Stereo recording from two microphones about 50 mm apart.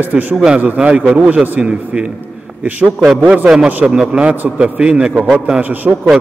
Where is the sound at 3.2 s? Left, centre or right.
Right.